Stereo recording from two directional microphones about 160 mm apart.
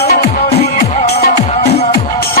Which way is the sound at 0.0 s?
80° left.